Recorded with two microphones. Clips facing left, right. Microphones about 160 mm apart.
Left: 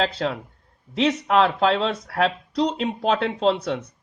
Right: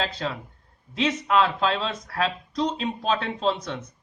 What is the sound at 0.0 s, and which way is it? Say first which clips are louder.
Speech: left 5 dB; 70° left (ahead or behind).